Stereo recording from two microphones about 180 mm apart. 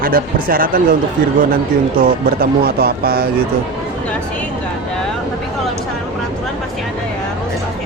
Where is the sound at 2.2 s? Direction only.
60° right (ahead or behind).